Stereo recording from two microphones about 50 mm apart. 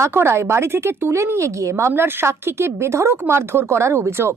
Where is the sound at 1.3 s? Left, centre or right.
Right.